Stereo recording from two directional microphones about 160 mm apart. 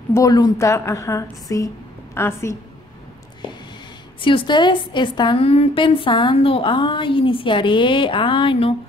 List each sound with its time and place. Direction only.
0.1 s a woman's voice: 20° left (ahead or behind)
4.2 s a woman's voice: 30° left (ahead or behind)